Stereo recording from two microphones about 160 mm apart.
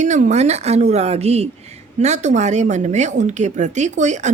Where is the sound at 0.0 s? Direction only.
50° right (ahead or behind).